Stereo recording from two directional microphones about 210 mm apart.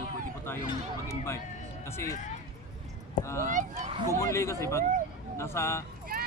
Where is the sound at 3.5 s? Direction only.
35° right (ahead or behind).